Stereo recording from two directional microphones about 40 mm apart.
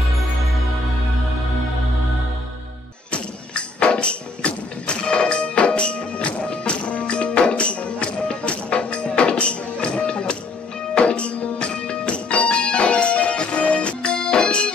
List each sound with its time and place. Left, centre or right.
3.1 s music: left
11.7 s music: left